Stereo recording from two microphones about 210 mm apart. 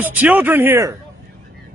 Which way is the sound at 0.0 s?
10° right (ahead or behind).